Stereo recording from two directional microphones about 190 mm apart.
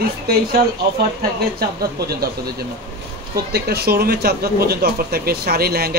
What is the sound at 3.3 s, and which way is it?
Speech, 55° right (ahead or behind).